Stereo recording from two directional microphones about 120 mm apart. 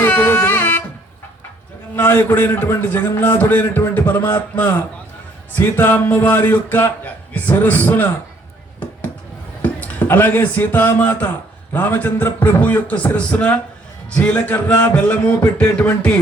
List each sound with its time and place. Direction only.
0.0 s music: 15° left (ahead or behind)
2.0 s a man's voice: 15° left (ahead or behind)
9.6 s a man's voice: 15° left (ahead or behind)